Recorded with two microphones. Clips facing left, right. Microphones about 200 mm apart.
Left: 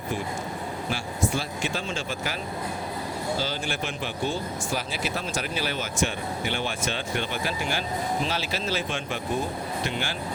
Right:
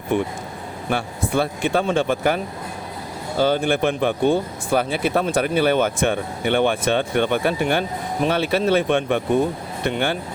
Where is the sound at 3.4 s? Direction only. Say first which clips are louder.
Right 12 dB; 55° right (ahead or behind).